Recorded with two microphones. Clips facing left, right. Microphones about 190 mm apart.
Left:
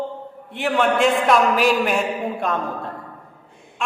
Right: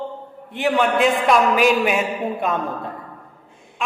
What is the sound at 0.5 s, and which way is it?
A man's voice, centre (ahead or behind).